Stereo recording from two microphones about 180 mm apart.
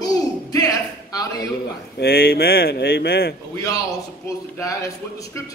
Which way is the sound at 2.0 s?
60° left (ahead or behind).